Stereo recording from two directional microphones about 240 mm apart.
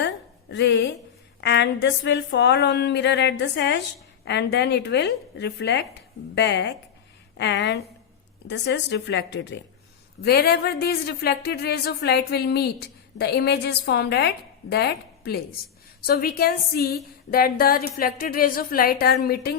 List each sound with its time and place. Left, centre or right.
0.5 s a woman's voice: left
1.4 s a sound: left
10.2 s speech: left